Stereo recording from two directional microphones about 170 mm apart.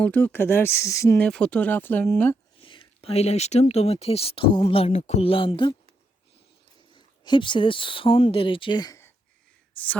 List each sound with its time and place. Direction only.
0.0 s speech: 10° left (ahead or behind)
1.3 s speech: 5° left (ahead or behind)
2.6 s speech: 30° left (ahead or behind)
6.9 s speech: 30° left (ahead or behind); by 10.0 s 10° left (ahead or behind)